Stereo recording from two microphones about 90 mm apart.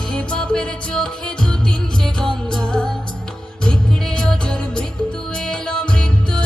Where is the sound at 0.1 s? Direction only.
10° left (ahead or behind).